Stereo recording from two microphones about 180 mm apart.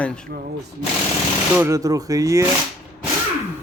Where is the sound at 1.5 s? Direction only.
15° right (ahead or behind).